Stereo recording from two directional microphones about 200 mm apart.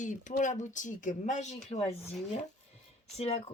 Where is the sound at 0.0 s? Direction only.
40° left (ahead or behind).